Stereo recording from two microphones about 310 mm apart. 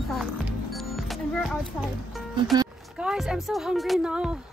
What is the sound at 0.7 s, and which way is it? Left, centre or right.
Music, centre.